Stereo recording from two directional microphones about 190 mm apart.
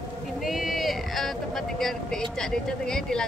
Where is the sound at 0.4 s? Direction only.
Centre (ahead or behind).